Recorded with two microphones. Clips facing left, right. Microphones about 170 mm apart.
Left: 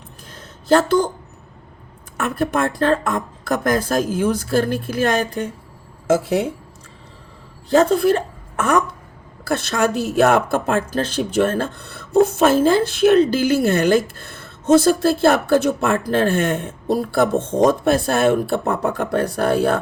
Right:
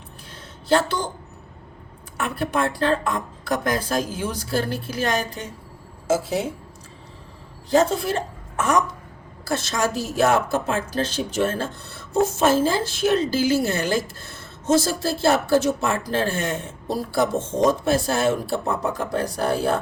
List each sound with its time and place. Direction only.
0.7 s a woman's voice: 45° left (ahead or behind)
2.1 s a woman's voice: 45° left (ahead or behind)
7.9 s a woman's voice: 60° left (ahead or behind)